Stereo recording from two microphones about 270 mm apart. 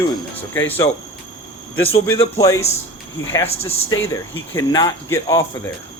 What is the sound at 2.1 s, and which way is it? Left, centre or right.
Speech, centre.